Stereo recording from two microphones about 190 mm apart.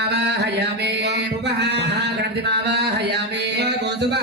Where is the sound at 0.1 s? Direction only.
60° right (ahead or behind).